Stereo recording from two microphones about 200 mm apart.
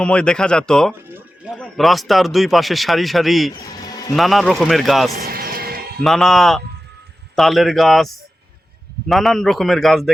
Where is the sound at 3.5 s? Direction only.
20° left (ahead or behind).